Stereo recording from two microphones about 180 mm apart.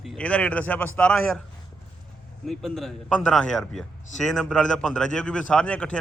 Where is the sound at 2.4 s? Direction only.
Centre (ahead or behind).